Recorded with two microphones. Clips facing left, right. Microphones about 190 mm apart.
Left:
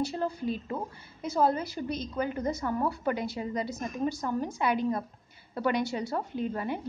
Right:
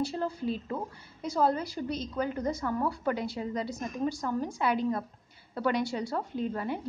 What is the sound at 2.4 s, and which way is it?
A woman's voice, 20° left (ahead or behind).